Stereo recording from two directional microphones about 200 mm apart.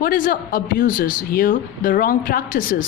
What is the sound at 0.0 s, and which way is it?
A woman's voice, 45° left (ahead or behind).